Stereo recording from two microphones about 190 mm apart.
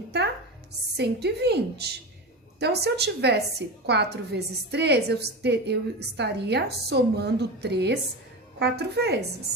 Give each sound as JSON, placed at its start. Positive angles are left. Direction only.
{"t": 0.9, "sound": "a woman's voice", "side_deg": -60}